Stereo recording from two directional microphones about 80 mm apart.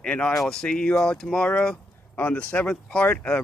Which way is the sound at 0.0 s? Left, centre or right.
Centre.